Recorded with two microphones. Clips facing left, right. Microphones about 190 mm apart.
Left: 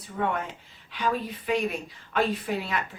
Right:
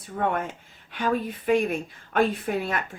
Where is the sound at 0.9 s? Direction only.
50° right (ahead or behind).